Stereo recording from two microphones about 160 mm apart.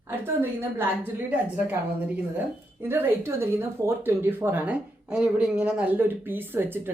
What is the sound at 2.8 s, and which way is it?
Speech, 15° right (ahead or behind).